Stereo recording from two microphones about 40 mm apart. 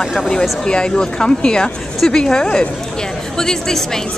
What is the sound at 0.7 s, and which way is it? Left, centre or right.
Speech, left.